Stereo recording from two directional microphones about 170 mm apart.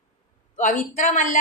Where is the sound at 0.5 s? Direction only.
45° left (ahead or behind).